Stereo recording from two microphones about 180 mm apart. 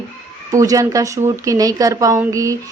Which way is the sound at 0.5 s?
20° right (ahead or behind).